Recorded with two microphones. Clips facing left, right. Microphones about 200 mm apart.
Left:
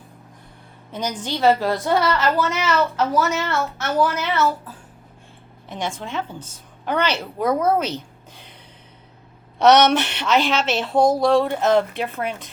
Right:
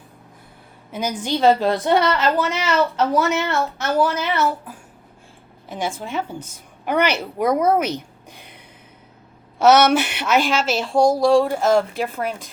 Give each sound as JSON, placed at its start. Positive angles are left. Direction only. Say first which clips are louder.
{"t": 0.9, "sound": "a woman's voice", "louder": "right 3 dB", "side_deg": -10}
{"t": 9.6, "sound": "a woman's voice", "louder": "even", "side_deg": -5}